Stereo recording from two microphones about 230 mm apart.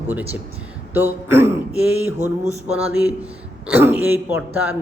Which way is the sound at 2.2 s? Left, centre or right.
Right.